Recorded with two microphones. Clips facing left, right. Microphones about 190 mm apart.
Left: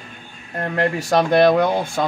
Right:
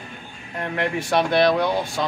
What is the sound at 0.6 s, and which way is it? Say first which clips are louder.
Speech: left 4 dB; 40° left (ahead or behind).